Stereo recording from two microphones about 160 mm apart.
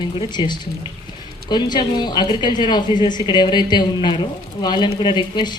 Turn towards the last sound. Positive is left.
turn(degrees=30)  # may be behind; listen again after turning